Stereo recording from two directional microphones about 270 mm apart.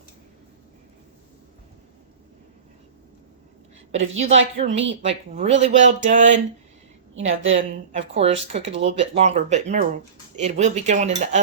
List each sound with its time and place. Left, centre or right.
3.9 s speech: right
4.2 s speech: right
4.7 s speech: right
5.0 s speech: right
7.5 s speech: right